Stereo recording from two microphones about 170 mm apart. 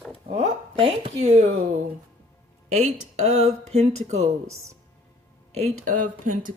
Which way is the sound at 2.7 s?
40° right (ahead or behind).